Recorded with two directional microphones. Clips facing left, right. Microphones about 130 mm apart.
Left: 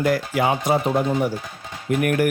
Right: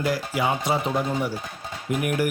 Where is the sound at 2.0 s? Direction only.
55° left (ahead or behind).